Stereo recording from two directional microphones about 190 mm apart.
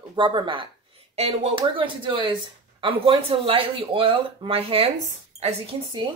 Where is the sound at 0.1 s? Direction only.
25° right (ahead or behind).